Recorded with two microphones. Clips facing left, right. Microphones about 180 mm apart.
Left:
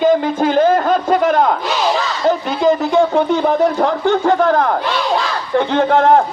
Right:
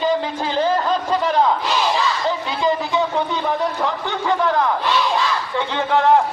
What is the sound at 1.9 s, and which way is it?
Speech, 50° left (ahead or behind).